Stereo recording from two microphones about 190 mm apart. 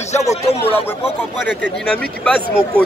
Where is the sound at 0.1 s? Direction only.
35° left (ahead or behind).